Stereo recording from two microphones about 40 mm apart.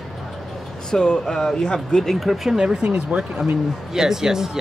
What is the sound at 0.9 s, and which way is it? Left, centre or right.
Speech, centre.